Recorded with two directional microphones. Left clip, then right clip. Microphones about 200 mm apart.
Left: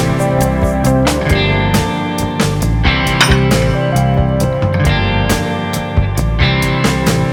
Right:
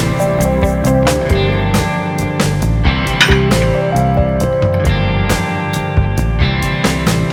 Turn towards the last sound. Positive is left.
turn(degrees=0)  # may be behind; listen again after turning